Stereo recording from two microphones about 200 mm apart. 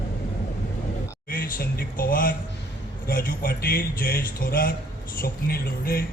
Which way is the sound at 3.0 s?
50° left (ahead or behind).